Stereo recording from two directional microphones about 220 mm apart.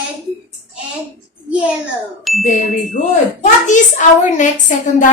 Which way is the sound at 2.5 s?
35° left (ahead or behind).